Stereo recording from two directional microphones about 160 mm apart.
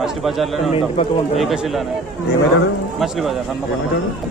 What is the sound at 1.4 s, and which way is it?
Speech, centre (ahead or behind).